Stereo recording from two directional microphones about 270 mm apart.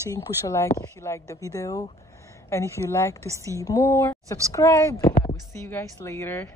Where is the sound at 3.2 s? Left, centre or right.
Centre.